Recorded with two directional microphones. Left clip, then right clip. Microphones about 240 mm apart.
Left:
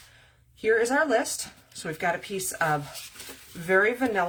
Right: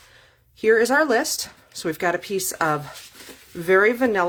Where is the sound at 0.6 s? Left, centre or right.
Right.